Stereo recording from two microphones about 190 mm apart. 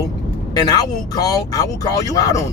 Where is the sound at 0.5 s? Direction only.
20° left (ahead or behind).